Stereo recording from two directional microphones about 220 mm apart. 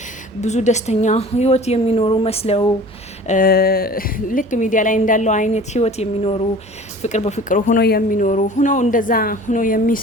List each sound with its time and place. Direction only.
0.4 s a woman's voice: 30° left (ahead or behind)
3.2 s a woman's voice: 40° left (ahead or behind)